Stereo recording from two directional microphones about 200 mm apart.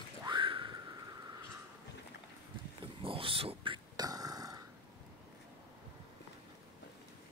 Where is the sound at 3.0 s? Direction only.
25° right (ahead or behind).